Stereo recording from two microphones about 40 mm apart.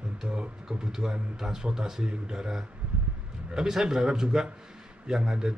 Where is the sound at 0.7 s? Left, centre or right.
Centre.